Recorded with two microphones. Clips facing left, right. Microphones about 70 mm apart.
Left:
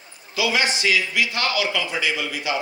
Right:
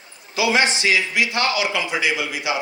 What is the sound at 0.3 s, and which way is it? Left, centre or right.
A man's voice, right.